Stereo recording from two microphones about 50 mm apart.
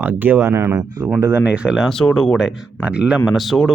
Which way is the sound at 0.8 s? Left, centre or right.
Right.